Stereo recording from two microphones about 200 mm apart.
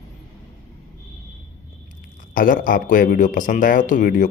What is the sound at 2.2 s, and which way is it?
Speech, 45° left (ahead or behind).